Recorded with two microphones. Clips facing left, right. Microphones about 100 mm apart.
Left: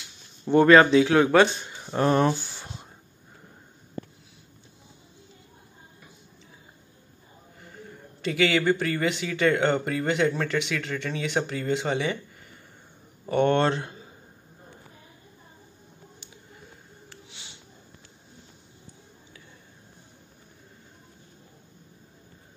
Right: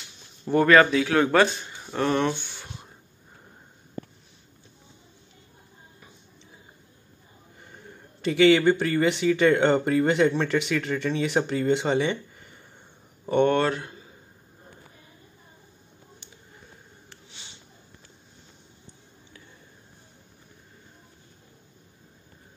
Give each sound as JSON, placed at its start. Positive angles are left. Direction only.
{"t": 0.7, "sound": "a man's voice", "side_deg": 20}
{"t": 1.4, "sound": "speech", "side_deg": 5}
{"t": 2.3, "sound": "a sound", "side_deg": 35}
{"t": 7.7, "sound": "speech", "side_deg": 0}
{"t": 13.4, "sound": "a man's voice", "side_deg": 20}